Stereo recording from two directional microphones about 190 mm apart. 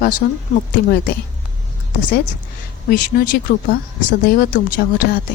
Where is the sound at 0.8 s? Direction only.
60° left (ahead or behind).